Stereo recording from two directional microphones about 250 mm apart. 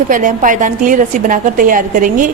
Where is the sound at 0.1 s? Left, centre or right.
Right.